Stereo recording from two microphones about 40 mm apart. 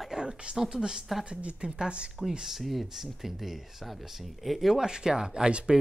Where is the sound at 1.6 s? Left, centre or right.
Centre.